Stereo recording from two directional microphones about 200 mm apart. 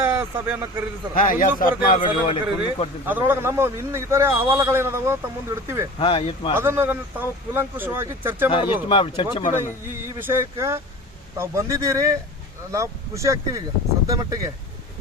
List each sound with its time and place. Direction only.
0.0 s a man's voice: 10° right (ahead or behind)
1.1 s a man's voice: 45° left (ahead or behind)
2.0 s speech: 25° left (ahead or behind)
3.1 s a man's voice: 10° right (ahead or behind)
6.0 s speech: 30° left (ahead or behind)
6.5 s a man's voice: 10° right (ahead or behind)
8.4 s speech: 25° left (ahead or behind)
9.6 s a man's voice: 10° right (ahead or behind)